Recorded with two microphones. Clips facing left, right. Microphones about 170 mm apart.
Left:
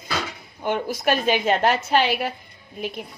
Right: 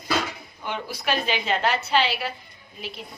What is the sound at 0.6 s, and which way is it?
Speech, 50° left (ahead or behind).